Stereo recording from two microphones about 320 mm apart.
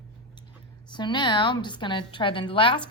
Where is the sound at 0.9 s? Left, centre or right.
Centre.